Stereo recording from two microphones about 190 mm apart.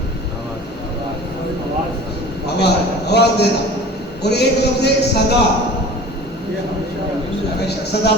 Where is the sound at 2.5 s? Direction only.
60° left (ahead or behind).